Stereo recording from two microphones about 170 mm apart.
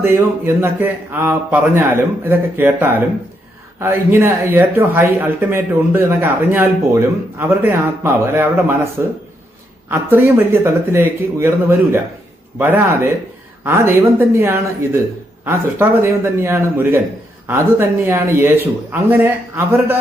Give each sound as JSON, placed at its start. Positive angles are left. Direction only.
{"t": 0.0, "sound": "speech", "side_deg": -15}